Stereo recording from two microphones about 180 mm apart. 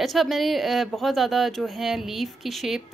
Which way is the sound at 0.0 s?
Centre (ahead or behind).